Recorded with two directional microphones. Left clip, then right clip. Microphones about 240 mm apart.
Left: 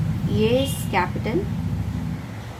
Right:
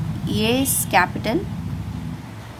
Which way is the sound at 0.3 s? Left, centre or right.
Right.